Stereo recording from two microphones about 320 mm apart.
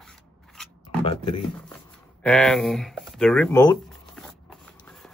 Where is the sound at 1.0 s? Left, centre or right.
Centre.